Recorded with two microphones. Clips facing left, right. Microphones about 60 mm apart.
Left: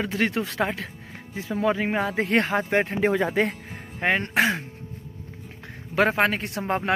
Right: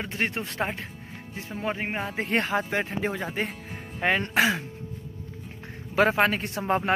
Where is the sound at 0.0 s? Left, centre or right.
Left.